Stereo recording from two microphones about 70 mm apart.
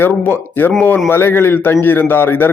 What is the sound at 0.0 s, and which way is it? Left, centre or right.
A man's voice, left.